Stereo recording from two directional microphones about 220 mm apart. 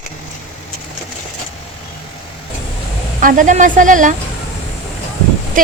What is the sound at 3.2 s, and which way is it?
Speech, 35° right (ahead or behind).